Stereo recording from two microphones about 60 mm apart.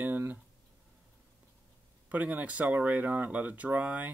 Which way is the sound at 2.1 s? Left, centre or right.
Right.